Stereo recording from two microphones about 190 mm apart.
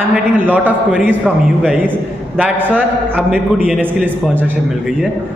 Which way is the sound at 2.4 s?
5° right (ahead or behind).